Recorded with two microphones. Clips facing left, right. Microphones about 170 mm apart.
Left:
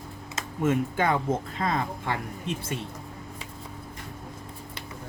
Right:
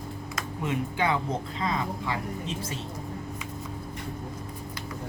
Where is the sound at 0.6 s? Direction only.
45° left (ahead or behind).